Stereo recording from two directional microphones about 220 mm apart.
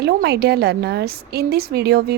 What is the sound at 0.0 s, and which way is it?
A woman's voice, 50° right (ahead or behind).